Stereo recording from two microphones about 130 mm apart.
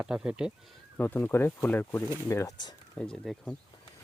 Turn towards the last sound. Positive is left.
turn(degrees=5)  # may be behind; listen again after turning